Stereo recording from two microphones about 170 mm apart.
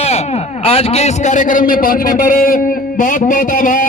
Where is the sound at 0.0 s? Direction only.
40° left (ahead or behind).